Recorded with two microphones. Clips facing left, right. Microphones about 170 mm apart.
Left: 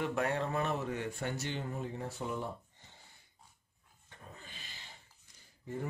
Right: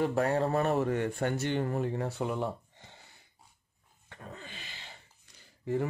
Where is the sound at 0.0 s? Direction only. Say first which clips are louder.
Right 6 dB; 35° right (ahead or behind); by 3.0 s 75° right (ahead or behind).